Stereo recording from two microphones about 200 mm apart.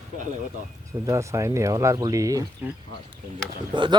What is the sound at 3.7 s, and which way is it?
Speech, 25° right (ahead or behind).